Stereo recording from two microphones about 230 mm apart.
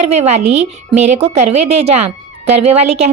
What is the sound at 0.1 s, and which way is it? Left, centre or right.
A woman's voice, right.